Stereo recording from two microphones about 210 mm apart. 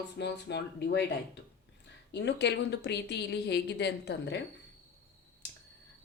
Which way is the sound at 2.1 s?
55° left (ahead or behind).